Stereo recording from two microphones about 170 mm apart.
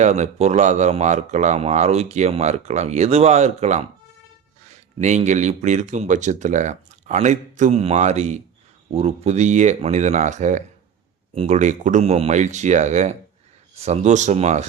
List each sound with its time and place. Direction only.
0.0 s speech: 40° right (ahead or behind)